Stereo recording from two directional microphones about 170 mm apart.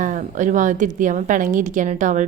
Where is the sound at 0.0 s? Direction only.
50° right (ahead or behind).